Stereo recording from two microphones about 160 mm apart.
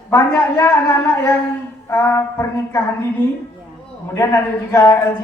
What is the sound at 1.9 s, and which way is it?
Speech, 15° left (ahead or behind).